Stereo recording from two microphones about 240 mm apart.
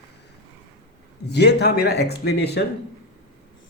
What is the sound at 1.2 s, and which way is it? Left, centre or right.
A man's voice, left.